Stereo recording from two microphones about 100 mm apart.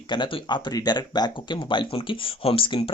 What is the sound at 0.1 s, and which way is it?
Speech, 50° left (ahead or behind).